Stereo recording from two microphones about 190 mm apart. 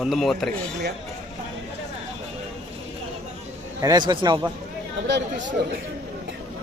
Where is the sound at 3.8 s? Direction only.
20° right (ahead or behind).